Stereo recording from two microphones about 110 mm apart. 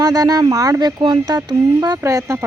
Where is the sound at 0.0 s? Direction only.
35° right (ahead or behind).